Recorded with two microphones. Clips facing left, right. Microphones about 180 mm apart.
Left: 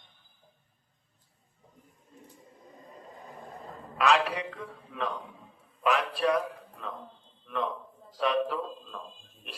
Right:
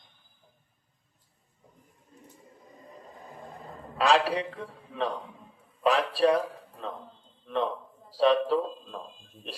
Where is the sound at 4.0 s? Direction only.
30° right (ahead or behind).